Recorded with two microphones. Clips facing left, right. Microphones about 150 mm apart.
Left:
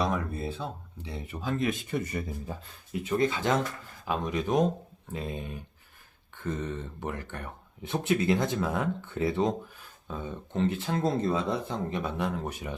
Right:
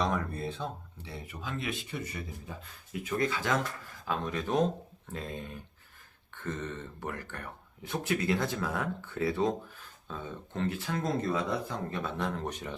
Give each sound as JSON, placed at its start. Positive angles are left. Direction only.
{"t": 0.0, "sound": "a sound", "side_deg": 5}
{"t": 1.1, "sound": "speech", "side_deg": 30}
{"t": 2.6, "sound": "speech", "side_deg": 25}
{"t": 4.0, "sound": "speech", "side_deg": 15}